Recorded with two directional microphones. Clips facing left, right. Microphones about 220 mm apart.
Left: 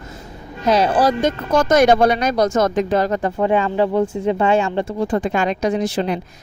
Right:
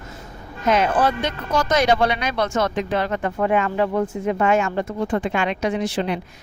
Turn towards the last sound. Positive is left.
turn(degrees=40)  # may be behind; listen again after turning